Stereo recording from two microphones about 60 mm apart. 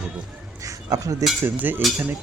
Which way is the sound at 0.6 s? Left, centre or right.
Right.